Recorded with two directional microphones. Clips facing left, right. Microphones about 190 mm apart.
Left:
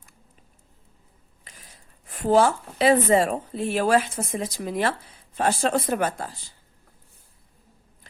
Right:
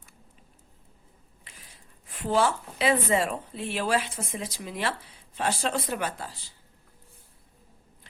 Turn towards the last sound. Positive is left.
turn(degrees=50)  # may be behind; listen again after turning